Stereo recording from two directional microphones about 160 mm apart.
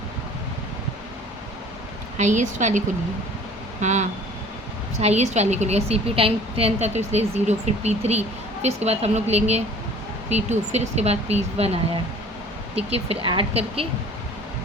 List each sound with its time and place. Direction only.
2.1 s a woman's voice: 50° right (ahead or behind)